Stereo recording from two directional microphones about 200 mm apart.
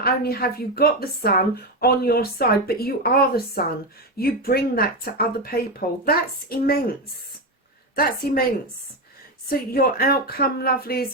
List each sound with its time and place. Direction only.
0.0 s a woman's voice: 50° left (ahead or behind)
7.9 s a woman's voice: 50° left (ahead or behind)
9.5 s a woman's voice: 50° left (ahead or behind)